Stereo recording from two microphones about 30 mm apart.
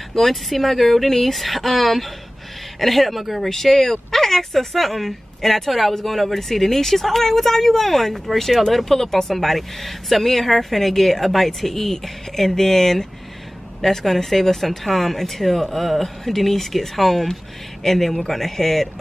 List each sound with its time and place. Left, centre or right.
0.1 s speech: centre
9.3 s speech: centre